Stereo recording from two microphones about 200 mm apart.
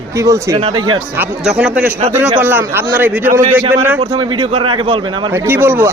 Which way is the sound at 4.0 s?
25° right (ahead or behind).